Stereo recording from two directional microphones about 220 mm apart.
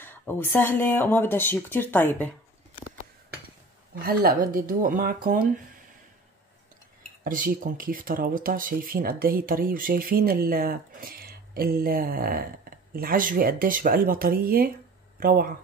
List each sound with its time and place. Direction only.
0.0 s speech: 10° left (ahead or behind)
4.0 s speech: 40° right (ahead or behind)
7.2 s speech: 40° right (ahead or behind)